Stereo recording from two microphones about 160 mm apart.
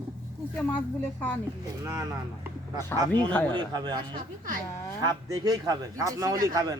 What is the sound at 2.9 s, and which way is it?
Speech, 25° right (ahead or behind).